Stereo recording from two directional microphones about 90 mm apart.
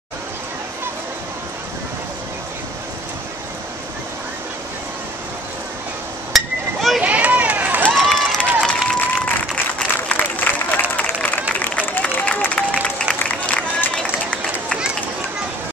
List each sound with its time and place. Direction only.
6.3 s hammer: centre (ahead or behind)
7.0 s run: 15° right (ahead or behind)
7.9 s a sound: 5° left (ahead or behind)
8.6 s applause: 5° left (ahead or behind)
9.8 s applause: 15° left (ahead or behind)
14.1 s run: 15° left (ahead or behind)